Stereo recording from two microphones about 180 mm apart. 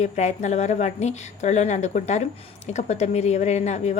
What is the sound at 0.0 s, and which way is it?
A woman's voice, 40° left (ahead or behind).